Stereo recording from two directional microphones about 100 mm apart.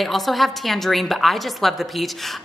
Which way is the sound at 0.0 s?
Centre (ahead or behind).